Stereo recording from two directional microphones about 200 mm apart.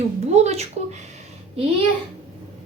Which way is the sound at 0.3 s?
35° right (ahead or behind).